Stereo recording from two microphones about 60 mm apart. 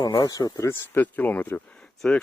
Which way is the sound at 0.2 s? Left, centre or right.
Left.